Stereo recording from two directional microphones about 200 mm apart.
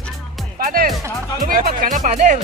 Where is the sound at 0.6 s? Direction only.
45° right (ahead or behind).